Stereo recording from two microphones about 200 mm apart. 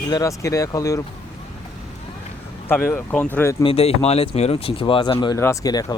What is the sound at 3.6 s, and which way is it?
Speech, 30° left (ahead or behind).